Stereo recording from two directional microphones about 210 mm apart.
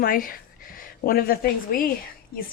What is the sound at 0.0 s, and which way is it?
A woman's voice, 45° left (ahead or behind).